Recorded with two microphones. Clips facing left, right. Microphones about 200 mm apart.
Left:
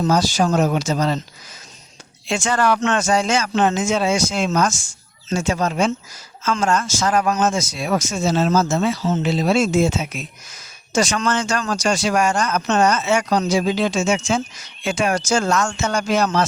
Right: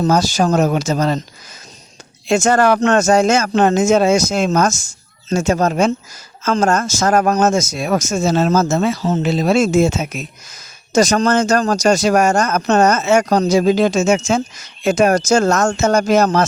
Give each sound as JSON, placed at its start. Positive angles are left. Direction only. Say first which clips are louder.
{"t": 0.0, "sound": "speech", "louder": "right 3 dB", "side_deg": -45}
{"t": 2.2, "sound": "speech", "louder": "right 6 dB", "side_deg": -45}